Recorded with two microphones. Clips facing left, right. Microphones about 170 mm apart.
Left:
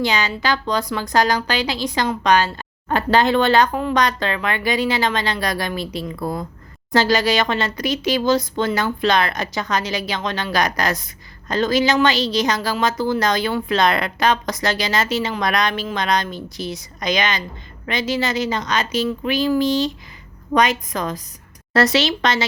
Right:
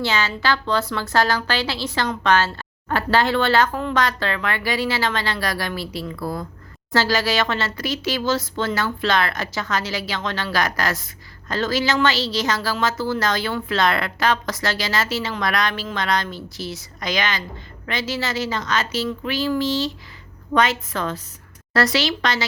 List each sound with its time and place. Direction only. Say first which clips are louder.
0.0 s speech: left 2 dB; 15° left (ahead or behind)